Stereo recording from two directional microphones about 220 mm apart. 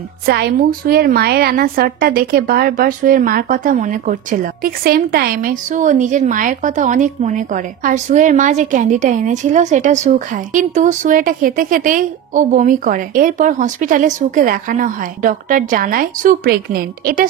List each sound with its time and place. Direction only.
0.3 s a woman's voice: 45° right (ahead or behind)